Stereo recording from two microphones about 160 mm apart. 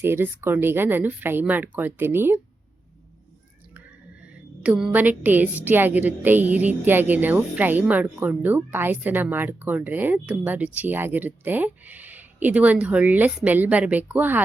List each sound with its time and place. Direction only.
0.0 s a woman's voice: 15° right (ahead or behind)
3.8 s a woman's voice: 5° right (ahead or behind)